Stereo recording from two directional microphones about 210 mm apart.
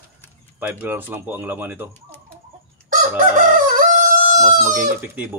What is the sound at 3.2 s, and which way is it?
Chicken, 40° right (ahead or behind).